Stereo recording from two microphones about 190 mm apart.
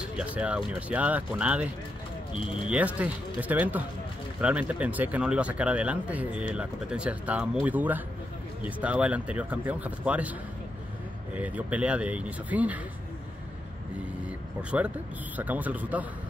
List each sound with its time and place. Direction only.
0.1 s speech: 5° right (ahead or behind)
2.3 s speech: 30° left (ahead or behind)
2.7 s speech: 5° right (ahead or behind)
11.3 s speech: 5° right (ahead or behind)
15.3 s speech: 10° right (ahead or behind)